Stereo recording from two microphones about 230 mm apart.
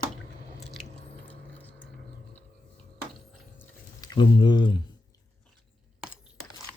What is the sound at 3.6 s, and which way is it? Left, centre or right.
Chewing, centre.